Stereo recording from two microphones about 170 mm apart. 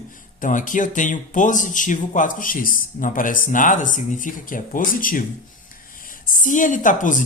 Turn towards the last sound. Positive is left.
turn(degrees=50)  # may be behind; listen again after turning